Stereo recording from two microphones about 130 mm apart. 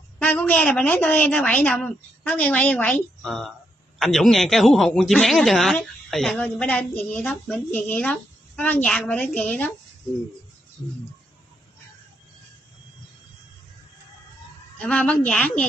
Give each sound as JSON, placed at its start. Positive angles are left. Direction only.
{"t": 0.2, "sound": "speech", "side_deg": 10}
{"t": 14.8, "sound": "speech", "side_deg": 10}